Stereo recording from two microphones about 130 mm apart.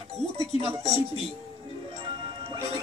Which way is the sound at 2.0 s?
40° right (ahead or behind).